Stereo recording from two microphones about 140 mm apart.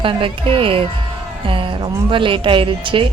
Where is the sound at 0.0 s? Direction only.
40° right (ahead or behind).